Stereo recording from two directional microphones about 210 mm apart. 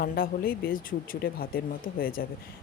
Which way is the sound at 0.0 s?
45° left (ahead or behind).